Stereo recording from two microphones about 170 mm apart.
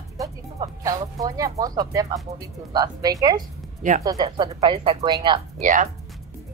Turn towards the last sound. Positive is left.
turn(degrees=-50)  # may be behind; listen again after turning